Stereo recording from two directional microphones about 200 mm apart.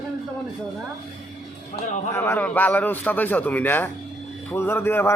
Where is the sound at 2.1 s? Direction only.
10° left (ahead or behind).